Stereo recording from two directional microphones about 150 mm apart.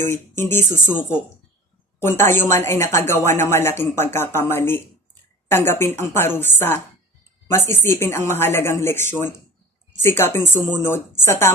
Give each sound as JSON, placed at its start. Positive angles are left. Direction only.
{"t": 0.0, "sound": "speech", "side_deg": 15}